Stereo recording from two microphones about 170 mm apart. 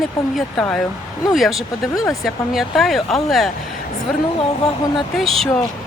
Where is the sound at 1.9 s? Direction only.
20° left (ahead or behind).